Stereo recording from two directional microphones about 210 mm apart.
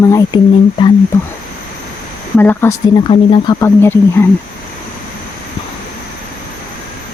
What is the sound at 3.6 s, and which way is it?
Speech, 10° left (ahead or behind).